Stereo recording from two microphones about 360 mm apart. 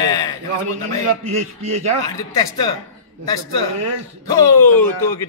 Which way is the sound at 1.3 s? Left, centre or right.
Right.